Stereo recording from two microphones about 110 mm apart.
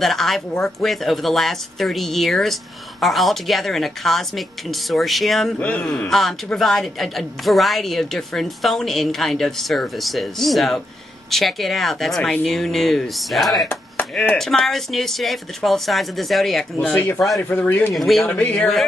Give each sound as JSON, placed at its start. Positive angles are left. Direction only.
{"t": 0.0, "sound": "speech", "side_deg": 0}
{"t": 5.6, "sound": "speech", "side_deg": 10}
{"t": 16.9, "sound": "speech", "side_deg": 20}
{"t": 17.9, "sound": "speech", "side_deg": 0}
{"t": 18.3, "sound": "speech", "side_deg": 15}